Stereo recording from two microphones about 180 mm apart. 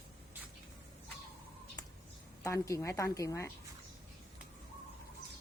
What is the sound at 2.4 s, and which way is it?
A woman's voice, 15° left (ahead or behind).